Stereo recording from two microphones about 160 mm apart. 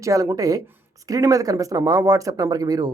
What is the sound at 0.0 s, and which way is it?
Speech, 20° right (ahead or behind).